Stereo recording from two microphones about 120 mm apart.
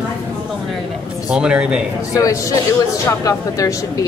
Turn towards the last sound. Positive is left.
turn(degrees=25)  # may be behind; listen again after turning